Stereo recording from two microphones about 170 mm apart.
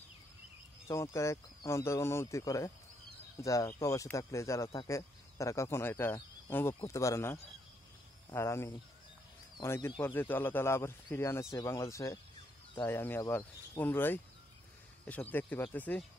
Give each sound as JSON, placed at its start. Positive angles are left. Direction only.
{"t": 0.8, "sound": "speech", "side_deg": 20}